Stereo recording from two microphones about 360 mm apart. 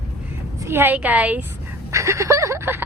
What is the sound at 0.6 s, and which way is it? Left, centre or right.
Speech, centre.